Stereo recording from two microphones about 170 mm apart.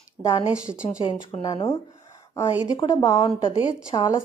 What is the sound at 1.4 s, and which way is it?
A woman's voice, 20° left (ahead or behind).